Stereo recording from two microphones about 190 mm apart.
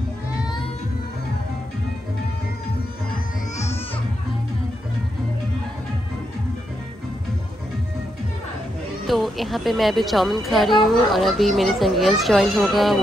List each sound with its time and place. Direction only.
9.0 s a woman's voice: centre (ahead or behind)